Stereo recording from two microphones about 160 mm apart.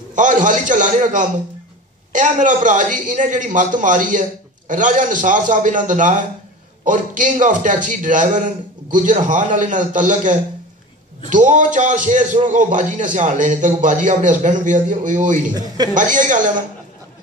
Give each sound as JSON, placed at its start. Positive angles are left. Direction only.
{"t": 0.1, "sound": "a man's voice", "side_deg": -50}